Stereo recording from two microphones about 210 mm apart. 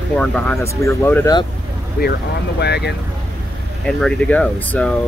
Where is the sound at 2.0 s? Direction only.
45° left (ahead or behind).